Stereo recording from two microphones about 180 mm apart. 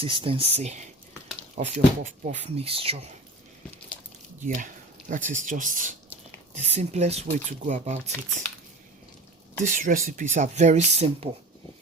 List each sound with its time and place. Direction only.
0.0 s speech: 30° right (ahead or behind)
4.4 s speech: 45° right (ahead or behind)
9.6 s speech: 45° right (ahead or behind)